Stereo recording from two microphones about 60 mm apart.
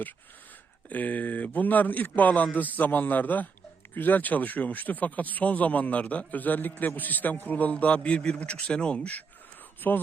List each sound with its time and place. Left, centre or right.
0.9 s speech: left
9.8 s speech: left